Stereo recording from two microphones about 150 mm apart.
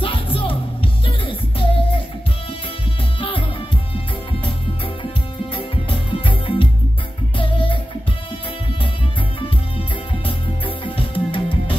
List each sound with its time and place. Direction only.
0.0 s music: 35° left (ahead or behind)
3.2 s music: 35° left (ahead or behind)
5.5 s music: 35° left (ahead or behind)
9.8 s music: 35° left (ahead or behind)